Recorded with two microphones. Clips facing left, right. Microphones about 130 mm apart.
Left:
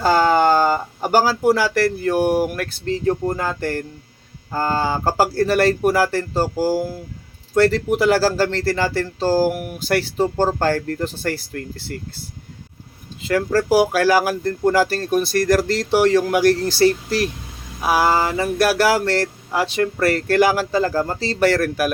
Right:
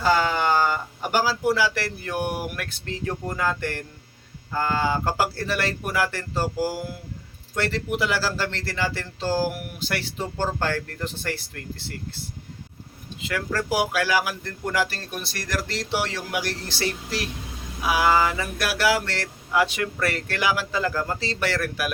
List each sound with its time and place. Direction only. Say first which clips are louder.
0.0 s speech: left 6 dB; 45° left (ahead or behind)
13.2 s speech: left 9 dB; 35° left (ahead or behind)